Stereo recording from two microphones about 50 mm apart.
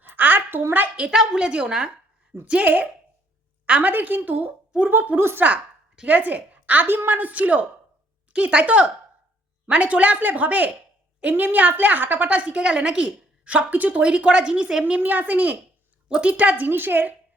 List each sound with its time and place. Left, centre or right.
0.0 s a sound: right
1.1 s a woman's voice: centre
2.4 s a woman's voice: right
6.1 s a woman's voice: right
6.8 s a woman's voice: right; by 15.0 s centre
15.0 s speech: right
16.0 s a woman's voice: right
16.6 s a child's voice: right